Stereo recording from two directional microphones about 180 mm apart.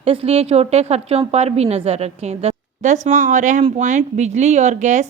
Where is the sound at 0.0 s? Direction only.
35° right (ahead or behind).